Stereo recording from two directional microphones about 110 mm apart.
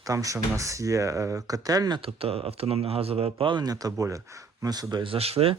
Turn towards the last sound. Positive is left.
turn(degrees=-65)  # may be behind; listen again after turning